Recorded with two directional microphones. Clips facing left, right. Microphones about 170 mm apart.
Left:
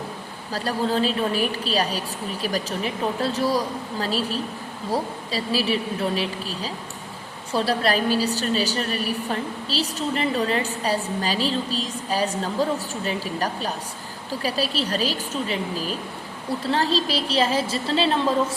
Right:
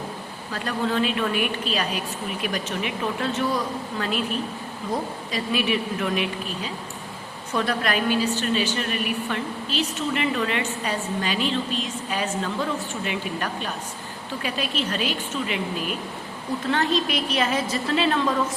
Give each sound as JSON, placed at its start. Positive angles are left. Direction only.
{"t": 0.5, "sound": "a woman's voice", "side_deg": 35}